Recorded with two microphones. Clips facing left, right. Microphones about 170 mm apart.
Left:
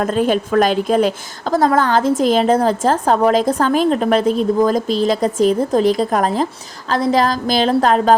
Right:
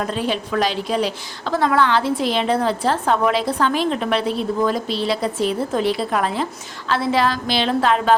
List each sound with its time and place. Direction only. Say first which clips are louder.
0.0 s a woman's voice: left 6 dB; 50° left (ahead or behind)